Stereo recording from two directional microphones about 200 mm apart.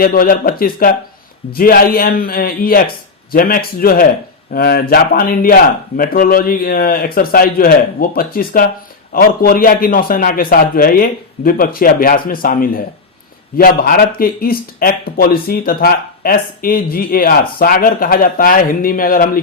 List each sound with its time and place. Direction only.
0.0 s speech: 45° left (ahead or behind)